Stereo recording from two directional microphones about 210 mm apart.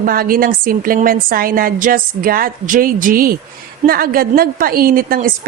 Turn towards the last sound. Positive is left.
turn(degrees=-45)  # may be behind; listen again after turning